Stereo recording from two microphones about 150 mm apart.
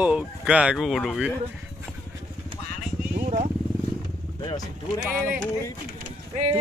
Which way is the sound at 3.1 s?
45° right (ahead or behind).